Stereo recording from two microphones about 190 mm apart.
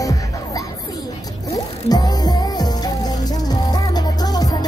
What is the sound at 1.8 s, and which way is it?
Music, 20° left (ahead or behind).